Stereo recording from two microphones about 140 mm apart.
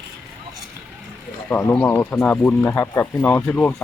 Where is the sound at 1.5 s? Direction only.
20° left (ahead or behind).